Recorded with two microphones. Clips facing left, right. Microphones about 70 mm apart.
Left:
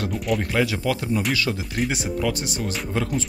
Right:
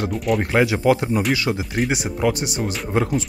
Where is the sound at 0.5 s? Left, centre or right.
Right.